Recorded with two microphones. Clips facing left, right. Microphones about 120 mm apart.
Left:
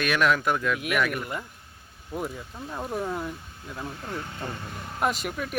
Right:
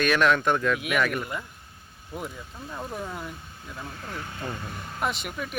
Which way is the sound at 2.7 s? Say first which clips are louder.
Left 4 dB; 15° left (ahead or behind).